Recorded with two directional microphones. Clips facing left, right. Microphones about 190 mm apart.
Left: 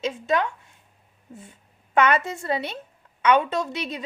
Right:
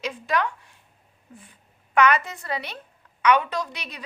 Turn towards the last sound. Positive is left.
turn(degrees=25)  # may be behind; listen again after turning